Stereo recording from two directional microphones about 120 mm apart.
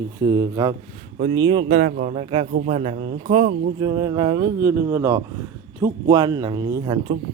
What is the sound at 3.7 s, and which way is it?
Speech, 30° right (ahead or behind).